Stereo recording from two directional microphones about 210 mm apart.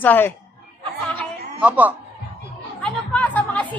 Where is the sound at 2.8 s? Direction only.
5° left (ahead or behind).